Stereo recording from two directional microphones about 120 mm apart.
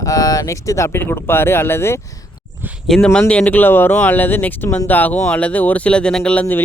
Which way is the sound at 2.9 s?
5° left (ahead or behind).